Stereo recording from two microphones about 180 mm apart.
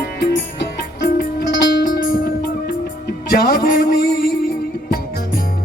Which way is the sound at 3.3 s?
55° left (ahead or behind).